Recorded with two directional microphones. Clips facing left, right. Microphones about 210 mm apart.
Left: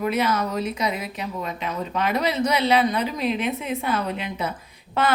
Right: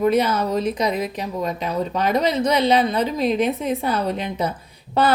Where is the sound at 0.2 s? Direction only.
35° right (ahead or behind).